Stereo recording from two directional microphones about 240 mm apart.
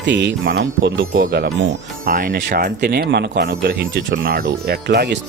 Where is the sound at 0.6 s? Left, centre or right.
Right.